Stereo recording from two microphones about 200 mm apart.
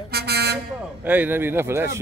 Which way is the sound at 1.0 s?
10° right (ahead or behind).